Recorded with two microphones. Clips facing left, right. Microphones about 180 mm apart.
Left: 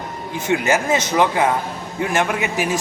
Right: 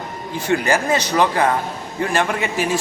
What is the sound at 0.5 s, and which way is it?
Speech, 5° left (ahead or behind).